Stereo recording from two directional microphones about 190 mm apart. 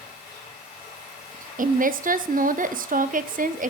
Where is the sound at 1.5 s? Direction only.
45° right (ahead or behind).